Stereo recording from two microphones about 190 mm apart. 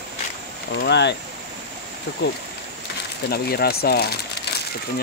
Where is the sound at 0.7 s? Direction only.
65° left (ahead or behind).